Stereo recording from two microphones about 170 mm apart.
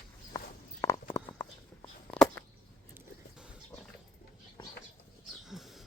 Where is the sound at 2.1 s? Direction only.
5° left (ahead or behind).